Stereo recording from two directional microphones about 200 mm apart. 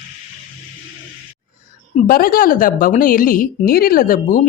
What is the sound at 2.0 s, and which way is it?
A woman's voice, 45° left (ahead or behind).